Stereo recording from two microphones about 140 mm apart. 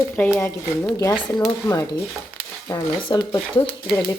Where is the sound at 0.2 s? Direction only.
10° left (ahead or behind).